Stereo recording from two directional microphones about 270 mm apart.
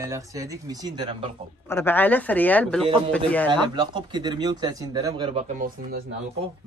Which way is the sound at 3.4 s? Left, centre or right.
Centre.